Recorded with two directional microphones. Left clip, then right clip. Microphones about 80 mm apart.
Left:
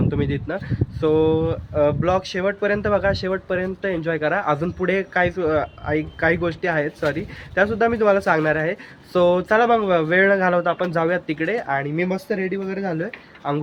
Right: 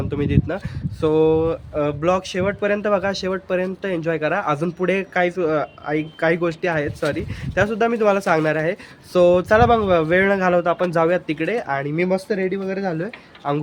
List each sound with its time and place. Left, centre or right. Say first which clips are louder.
0.1 s speech: right 2 dB; centre